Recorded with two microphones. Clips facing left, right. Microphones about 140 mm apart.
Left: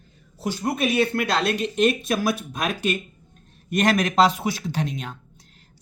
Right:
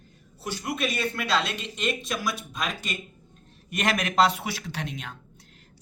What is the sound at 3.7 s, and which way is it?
Speech, 40° left (ahead or behind).